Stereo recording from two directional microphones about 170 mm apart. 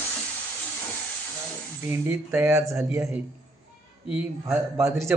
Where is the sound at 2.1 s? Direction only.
15° right (ahead or behind).